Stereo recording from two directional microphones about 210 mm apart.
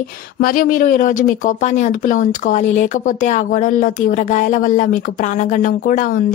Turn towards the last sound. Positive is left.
turn(degrees=40)  # may be behind; listen again after turning